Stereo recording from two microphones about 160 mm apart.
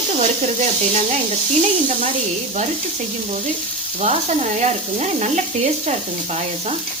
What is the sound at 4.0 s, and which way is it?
Stir, 45° right (ahead or behind).